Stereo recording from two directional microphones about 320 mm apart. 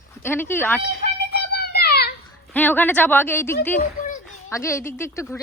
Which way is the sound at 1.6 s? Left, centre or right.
Left.